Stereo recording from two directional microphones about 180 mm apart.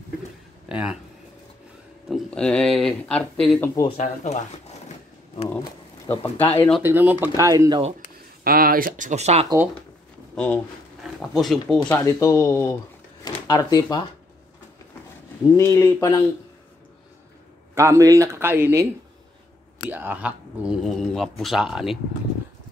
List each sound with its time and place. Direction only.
0.7 s speech: 5° right (ahead or behind)
2.0 s speech: centre (ahead or behind)
3.9 s speech: 40° left (ahead or behind)
6.0 s speech: 10° left (ahead or behind)
6.8 s speech: 10° right (ahead or behind)
8.5 s speech: 55° right (ahead or behind); by 9.5 s 35° right (ahead or behind)
10.3 s speech: 10° left (ahead or behind)
12.0 s speech: 15° left (ahead or behind)
15.5 s speech: 15° left (ahead or behind)
17.7 s speech: 15° right (ahead or behind)
19.9 s speech: 10° right (ahead or behind)